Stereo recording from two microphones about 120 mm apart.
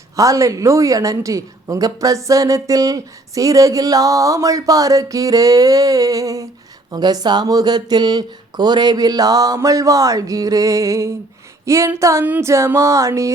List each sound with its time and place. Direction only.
0.2 s a woman's voice: 30° right (ahead or behind)